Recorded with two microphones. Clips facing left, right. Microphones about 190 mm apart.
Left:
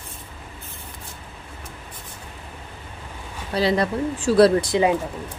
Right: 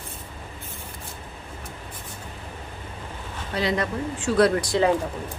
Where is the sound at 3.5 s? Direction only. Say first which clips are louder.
Left 4 dB; 35° left (ahead or behind).